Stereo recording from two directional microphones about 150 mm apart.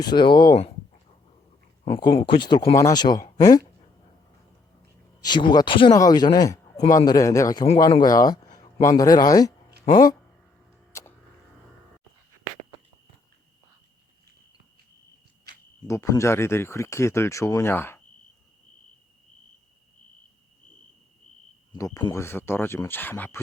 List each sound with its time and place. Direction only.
0.0 s speech: 30° left (ahead or behind)
1.8 s speech: 35° left (ahead or behind)
5.2 s speech: 30° left (ahead or behind)
15.9 s speech: 20° left (ahead or behind)
21.7 s speech: 25° left (ahead or behind)